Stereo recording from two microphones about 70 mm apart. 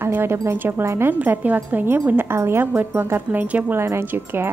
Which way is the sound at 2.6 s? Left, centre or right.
Right.